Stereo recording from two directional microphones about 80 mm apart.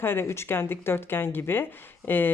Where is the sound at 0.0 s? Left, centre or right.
Left.